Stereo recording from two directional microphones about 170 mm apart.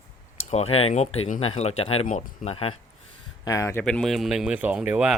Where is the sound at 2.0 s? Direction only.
50° left (ahead or behind).